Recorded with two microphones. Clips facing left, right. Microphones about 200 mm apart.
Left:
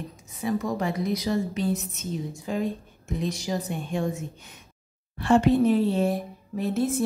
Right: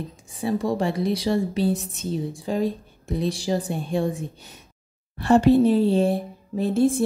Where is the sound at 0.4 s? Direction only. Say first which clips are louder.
Right 3 dB; 30° right (ahead or behind).